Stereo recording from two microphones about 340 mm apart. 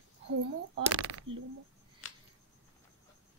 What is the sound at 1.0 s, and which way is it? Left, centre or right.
Speech, right.